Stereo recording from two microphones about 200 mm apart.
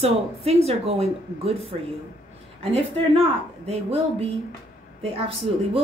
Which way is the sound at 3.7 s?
30° right (ahead or behind).